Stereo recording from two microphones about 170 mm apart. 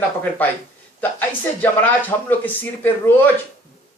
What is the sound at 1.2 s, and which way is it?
Speech, 10° left (ahead or behind).